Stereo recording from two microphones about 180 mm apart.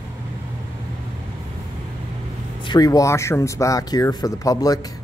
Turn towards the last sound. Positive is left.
turn(degrees=20)  # may be behind; listen again after turning